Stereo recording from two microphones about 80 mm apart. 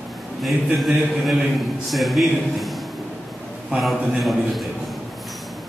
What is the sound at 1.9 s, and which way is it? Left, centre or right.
A man's voice, centre.